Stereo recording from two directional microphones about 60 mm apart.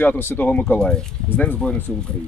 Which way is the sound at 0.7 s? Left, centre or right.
Centre.